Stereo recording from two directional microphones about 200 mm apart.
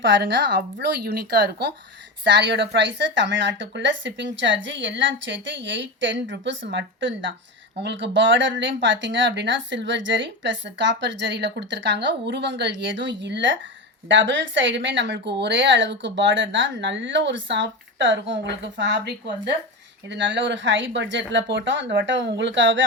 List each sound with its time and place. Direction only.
0.0 s speech: 60° right (ahead or behind)